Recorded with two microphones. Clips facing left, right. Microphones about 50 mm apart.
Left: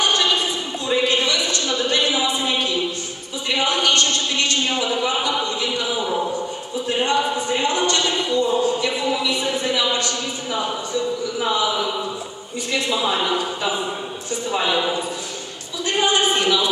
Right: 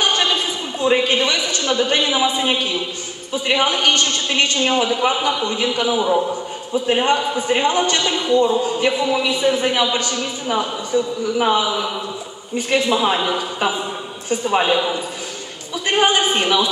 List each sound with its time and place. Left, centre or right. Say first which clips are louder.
0.0 s a sound: right 1 dB; right
0.8 s a man's voice: right 3 dB; right
11.3 s speech: right 4 dB; right
14.5 s a man's voice: right 4 dB; right
15.9 s a man's voice: right 2 dB; right